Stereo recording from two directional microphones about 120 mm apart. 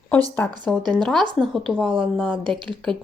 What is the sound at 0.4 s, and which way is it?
Speech, 15° left (ahead or behind).